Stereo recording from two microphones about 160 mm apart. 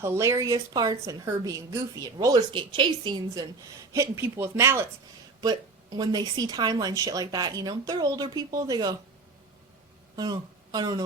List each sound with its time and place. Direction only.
0.0 s a woman's voice: 15° right (ahead or behind)
5.4 s a woman's voice: 25° right (ahead or behind)
10.2 s speech: 25° right (ahead or behind)